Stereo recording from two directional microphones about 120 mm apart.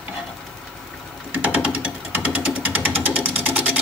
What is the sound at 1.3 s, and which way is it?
Sewing machine, 10° right (ahead or behind).